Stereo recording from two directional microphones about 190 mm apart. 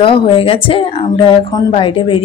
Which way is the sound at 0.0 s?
25° left (ahead or behind).